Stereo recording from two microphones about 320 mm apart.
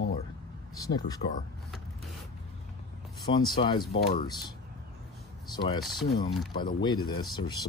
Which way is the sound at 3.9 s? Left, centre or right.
Left.